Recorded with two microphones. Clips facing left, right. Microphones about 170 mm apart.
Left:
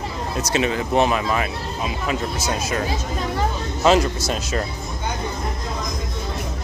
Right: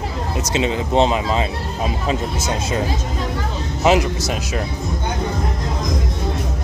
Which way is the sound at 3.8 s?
15° right (ahead or behind).